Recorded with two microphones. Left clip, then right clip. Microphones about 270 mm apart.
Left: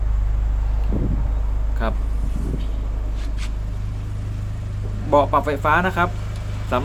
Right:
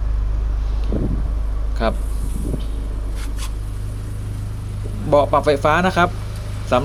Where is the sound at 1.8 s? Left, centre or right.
Centre.